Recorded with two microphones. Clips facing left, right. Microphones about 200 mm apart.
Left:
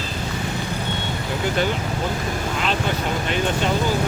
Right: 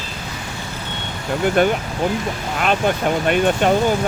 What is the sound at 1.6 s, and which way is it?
Speech, 55° right (ahead or behind).